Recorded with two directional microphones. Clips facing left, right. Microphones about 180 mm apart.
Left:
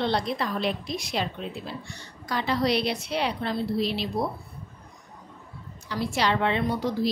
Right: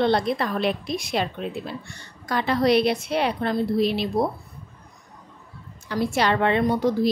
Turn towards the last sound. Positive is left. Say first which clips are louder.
# right 5 dB
turn(degrees=-50)  # may be behind; listen again after turning